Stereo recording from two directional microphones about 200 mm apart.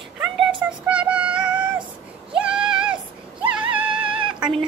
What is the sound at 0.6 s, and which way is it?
Synthetic singing, 5° right (ahead or behind).